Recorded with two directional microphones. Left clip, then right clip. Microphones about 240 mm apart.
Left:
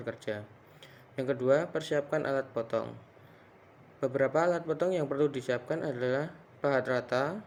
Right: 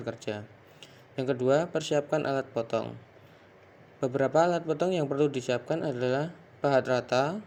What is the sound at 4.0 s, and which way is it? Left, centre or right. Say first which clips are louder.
Speech: right 3 dB; right.